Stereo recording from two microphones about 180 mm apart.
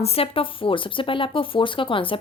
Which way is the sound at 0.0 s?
35° left (ahead or behind).